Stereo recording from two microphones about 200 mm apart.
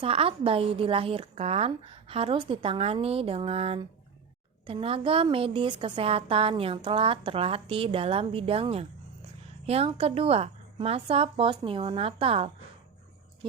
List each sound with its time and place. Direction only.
0.0 s a woman's voice: 30° right (ahead or behind)